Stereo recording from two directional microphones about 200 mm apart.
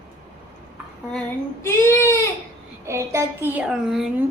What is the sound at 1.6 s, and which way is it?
Speech, 15° left (ahead or behind).